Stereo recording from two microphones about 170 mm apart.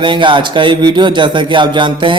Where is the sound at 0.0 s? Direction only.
30° right (ahead or behind).